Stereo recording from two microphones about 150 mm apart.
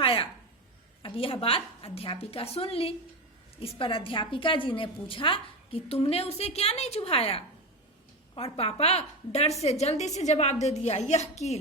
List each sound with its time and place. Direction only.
0.0 s a sound: 35° left (ahead or behind)
1.0 s a woman's voice: 40° left (ahead or behind)
8.5 s a woman's voice: 40° left (ahead or behind)